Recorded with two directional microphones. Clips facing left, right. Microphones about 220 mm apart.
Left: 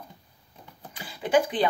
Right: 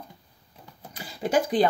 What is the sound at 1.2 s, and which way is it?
Speech, 40° right (ahead or behind).